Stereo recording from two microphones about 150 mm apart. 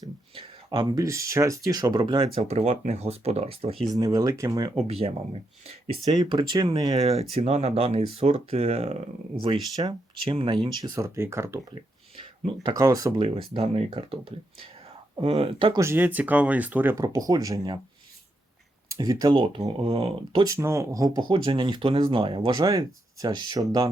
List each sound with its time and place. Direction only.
0.3 s speech: 35° right (ahead or behind)
3.8 s speech: 25° right (ahead or behind)
4.7 s speech: 40° right (ahead or behind)
6.3 s speech: 30° right (ahead or behind)
7.1 s speech: 45° right (ahead or behind)
9.7 s speech: 25° right (ahead or behind)
12.7 s speech: 25° right (ahead or behind)
13.1 s speech: 40° right (ahead or behind)
15.8 s speech: 15° right (ahead or behind)
18.9 s speech: 25° right (ahead or behind)
20.4 s speech: 20° right (ahead or behind)